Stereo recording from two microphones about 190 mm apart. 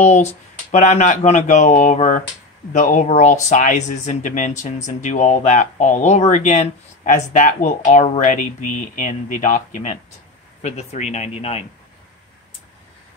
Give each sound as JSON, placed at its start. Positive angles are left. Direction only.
{"t": 0.0, "sound": "speech", "side_deg": 35}